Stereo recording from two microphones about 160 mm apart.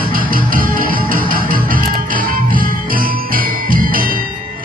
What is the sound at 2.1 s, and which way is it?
Jingle bell, 60° right (ahead or behind).